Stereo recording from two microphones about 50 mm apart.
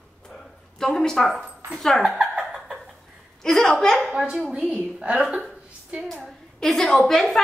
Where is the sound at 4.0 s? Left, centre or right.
Centre.